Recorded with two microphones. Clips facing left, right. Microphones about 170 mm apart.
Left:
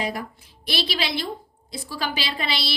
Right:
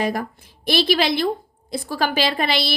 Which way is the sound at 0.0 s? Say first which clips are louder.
Right 5 dB; 50° right (ahead or behind).